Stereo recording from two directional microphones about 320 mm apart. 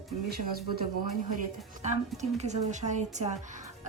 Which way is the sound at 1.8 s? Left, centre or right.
Right.